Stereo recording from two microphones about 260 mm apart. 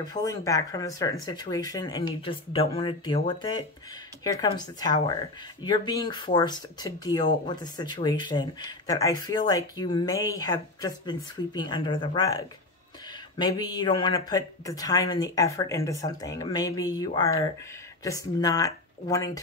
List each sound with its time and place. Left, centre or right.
0.0 s speech: centre